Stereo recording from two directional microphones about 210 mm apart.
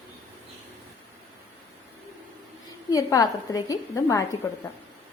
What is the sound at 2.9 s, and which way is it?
A woman's voice, 15° left (ahead or behind).